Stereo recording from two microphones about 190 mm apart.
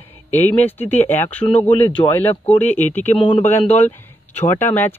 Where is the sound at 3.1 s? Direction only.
30° left (ahead or behind).